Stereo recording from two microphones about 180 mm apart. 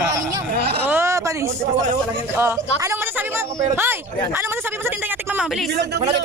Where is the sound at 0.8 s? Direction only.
10° right (ahead or behind).